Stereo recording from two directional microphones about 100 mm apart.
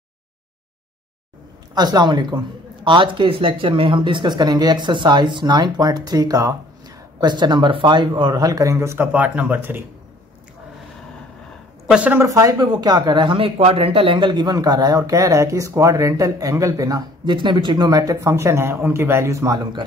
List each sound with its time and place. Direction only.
1.8 s speech: 45° right (ahead or behind)
7.2 s speech: 45° right (ahead or behind); by 9.8 s 20° right (ahead or behind)
11.9 s speech: 15° right (ahead or behind)
12.2 s speech: 35° right (ahead or behind)